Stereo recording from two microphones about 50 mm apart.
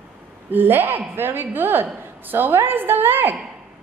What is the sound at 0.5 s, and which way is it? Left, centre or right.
A woman's voice, right.